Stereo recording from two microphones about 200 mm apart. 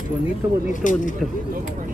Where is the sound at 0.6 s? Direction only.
40° left (ahead or behind).